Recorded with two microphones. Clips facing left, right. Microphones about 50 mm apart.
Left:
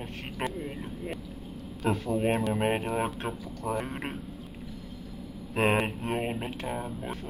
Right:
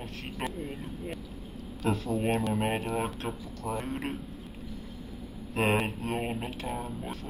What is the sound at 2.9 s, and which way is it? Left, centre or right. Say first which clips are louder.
Speech: left 2 dB; left.